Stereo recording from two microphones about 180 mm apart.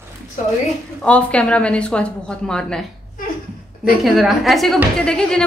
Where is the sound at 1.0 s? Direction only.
5° left (ahead or behind).